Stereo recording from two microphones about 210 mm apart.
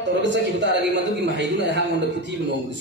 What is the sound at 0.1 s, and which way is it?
A man's voice, 55° right (ahead or behind).